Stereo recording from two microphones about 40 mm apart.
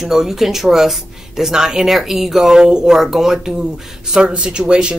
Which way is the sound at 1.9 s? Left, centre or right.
Centre.